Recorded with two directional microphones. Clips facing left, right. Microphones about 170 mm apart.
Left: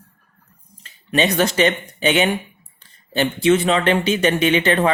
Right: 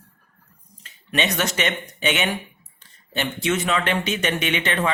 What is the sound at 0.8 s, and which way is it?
Speech, 30° left (ahead or behind).